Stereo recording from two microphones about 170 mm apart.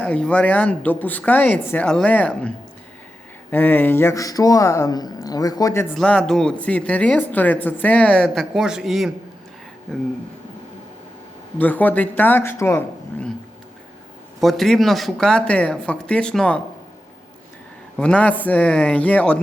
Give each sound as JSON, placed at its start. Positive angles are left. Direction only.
{"t": 0.0, "sound": "speech", "side_deg": 5}
{"t": 3.5, "sound": "speech", "side_deg": 10}
{"t": 5.9, "sound": "speech", "side_deg": 5}
{"t": 11.5, "sound": "speech", "side_deg": 10}
{"t": 14.4, "sound": "speech", "side_deg": 0}
{"t": 17.9, "sound": "speech", "side_deg": 5}